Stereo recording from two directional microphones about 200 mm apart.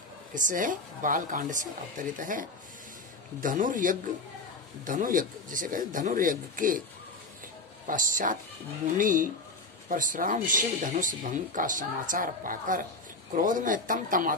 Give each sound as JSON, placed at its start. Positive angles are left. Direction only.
{"t": 0.3, "sound": "speech", "side_deg": -40}
{"t": 7.8, "sound": "speech", "side_deg": -40}